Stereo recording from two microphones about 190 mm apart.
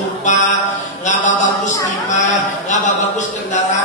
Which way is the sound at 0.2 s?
40° left (ahead or behind).